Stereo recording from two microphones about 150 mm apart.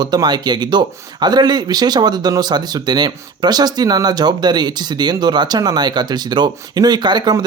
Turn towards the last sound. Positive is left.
turn(degrees=-30)  # may be behind; listen again after turning